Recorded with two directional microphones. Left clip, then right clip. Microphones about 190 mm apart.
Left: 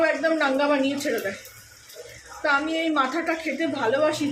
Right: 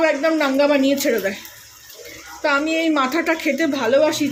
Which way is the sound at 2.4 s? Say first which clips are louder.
Right 4 dB; 50° right (ahead or behind).